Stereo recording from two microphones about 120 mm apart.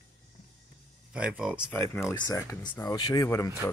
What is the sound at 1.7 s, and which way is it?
Speech, 20° left (ahead or behind).